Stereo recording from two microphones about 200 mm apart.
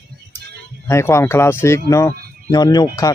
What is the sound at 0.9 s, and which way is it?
A man's voice, 15° left (ahead or behind).